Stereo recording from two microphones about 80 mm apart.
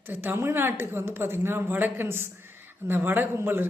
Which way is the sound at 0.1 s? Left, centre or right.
Right.